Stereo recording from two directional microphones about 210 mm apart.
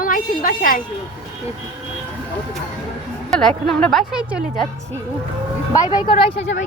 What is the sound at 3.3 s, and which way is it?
Speech, centre (ahead or behind).